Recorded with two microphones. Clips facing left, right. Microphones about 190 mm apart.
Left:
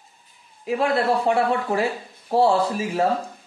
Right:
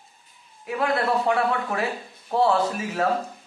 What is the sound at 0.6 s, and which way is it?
A man's voice, 30° left (ahead or behind).